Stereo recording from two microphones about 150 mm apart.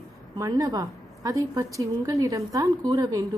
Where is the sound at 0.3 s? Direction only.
25° right (ahead or behind).